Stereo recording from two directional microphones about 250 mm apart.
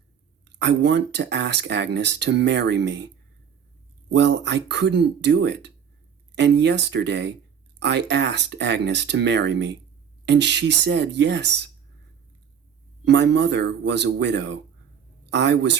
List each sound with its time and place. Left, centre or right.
0.6 s speech: right
4.1 s speech: right
13.1 s speech: right